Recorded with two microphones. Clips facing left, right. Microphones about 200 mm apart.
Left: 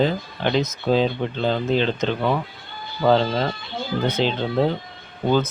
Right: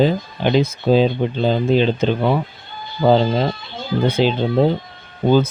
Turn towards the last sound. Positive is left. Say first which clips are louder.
# right 5 dB
turn(degrees=-10)  # may be behind; listen again after turning